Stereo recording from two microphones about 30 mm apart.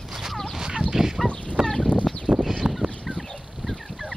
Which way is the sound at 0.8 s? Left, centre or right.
Centre.